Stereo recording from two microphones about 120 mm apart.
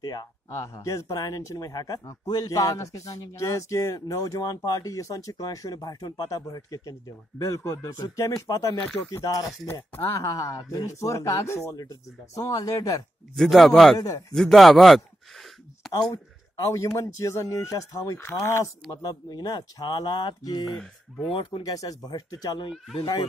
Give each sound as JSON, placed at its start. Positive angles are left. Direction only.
{"t": 0.0, "sound": "speech", "side_deg": 35}
{"t": 9.7, "sound": "speech", "side_deg": 20}
{"t": 13.4, "sound": "speech", "side_deg": 0}
{"t": 13.9, "sound": "speech", "side_deg": 30}
{"t": 14.3, "sound": "a sound", "side_deg": 0}
{"t": 16.5, "sound": "speech", "side_deg": 25}
{"t": 20.7, "sound": "speech", "side_deg": 0}
{"t": 21.3, "sound": "speech", "side_deg": 45}
{"t": 21.6, "sound": "speech", "side_deg": 30}